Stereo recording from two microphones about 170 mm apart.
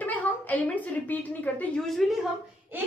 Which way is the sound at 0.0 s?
10° left (ahead or behind).